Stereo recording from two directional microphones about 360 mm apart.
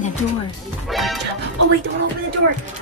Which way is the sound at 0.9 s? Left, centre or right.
Centre.